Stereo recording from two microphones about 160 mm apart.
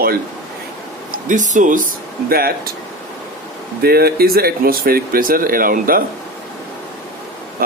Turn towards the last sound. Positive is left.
turn(degrees=-60)  # may be behind; listen again after turning